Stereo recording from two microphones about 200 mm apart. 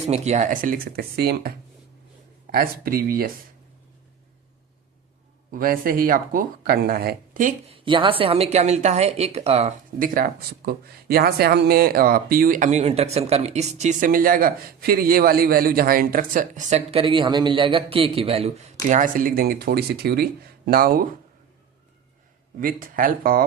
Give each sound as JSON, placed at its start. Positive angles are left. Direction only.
{"t": 0.1, "sound": "speech", "side_deg": -35}
{"t": 5.5, "sound": "speech", "side_deg": -45}
{"t": 7.9, "sound": "a woman's voice", "side_deg": -25}
{"t": 10.7, "sound": "speech", "side_deg": -50}
{"t": 22.6, "sound": "speech", "side_deg": -45}